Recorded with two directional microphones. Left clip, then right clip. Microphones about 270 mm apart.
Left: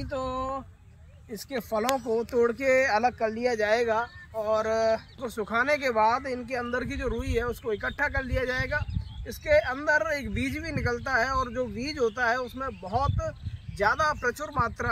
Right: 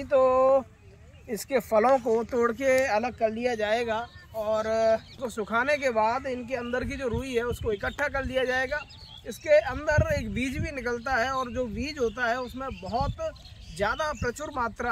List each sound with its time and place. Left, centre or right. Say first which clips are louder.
0.1 s speech: right 11 dB; centre
1.5 s speech: right 6 dB; centre
3.9 s speech: left 3 dB; centre
13.9 s speech: left 3 dB; centre